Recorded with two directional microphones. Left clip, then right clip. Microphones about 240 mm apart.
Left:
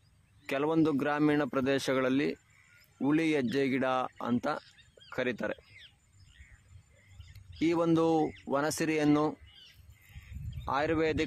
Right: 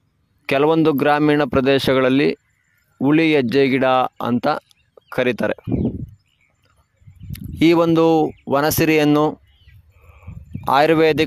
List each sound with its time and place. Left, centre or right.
0.5 s speech: right
7.3 s speech: right
10.6 s speech: right